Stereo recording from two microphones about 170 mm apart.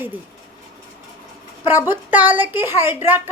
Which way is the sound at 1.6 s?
15° right (ahead or behind).